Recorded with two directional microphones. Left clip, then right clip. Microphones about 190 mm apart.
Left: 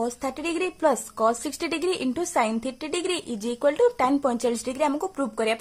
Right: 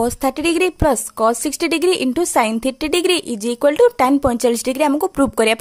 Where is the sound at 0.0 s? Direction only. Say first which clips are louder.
Right 10 dB; 40° right (ahead or behind).